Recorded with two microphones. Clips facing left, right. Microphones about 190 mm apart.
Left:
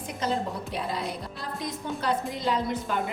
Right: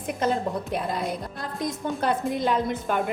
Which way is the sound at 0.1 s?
50° right (ahead or behind).